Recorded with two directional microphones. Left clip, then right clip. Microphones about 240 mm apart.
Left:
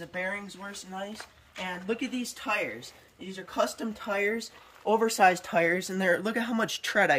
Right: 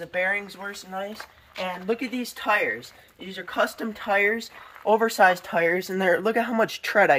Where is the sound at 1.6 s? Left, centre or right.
Centre.